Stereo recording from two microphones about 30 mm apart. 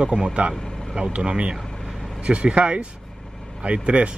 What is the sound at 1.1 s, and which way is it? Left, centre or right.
Speech, right.